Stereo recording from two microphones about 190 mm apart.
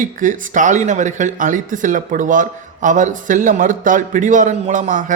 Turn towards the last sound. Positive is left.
turn(degrees=-40)  # may be behind; listen again after turning